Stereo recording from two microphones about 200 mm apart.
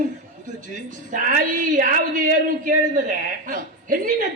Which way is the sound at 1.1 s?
40° right (ahead or behind).